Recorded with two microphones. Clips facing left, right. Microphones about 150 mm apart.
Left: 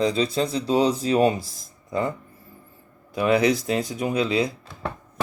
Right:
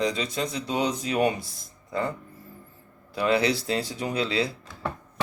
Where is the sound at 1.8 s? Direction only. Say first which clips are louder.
Left 3 dB; 20° left (ahead or behind).